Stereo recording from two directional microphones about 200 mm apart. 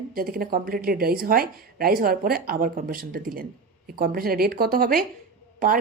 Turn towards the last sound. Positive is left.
turn(degrees=-45)  # may be behind; listen again after turning